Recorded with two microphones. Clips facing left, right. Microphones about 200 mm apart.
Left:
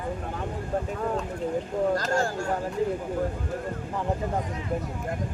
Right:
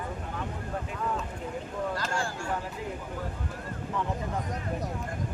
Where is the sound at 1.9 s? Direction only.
40° left (ahead or behind).